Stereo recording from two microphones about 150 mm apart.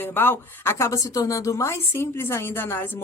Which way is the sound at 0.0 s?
15° left (ahead or behind).